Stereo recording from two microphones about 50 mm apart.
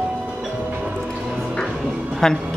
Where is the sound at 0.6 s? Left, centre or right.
Right.